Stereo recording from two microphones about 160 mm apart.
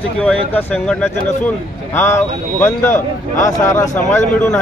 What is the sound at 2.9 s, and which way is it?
Speech, 50° left (ahead or behind).